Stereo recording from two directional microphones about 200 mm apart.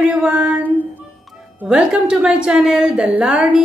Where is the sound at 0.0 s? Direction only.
5° right (ahead or behind).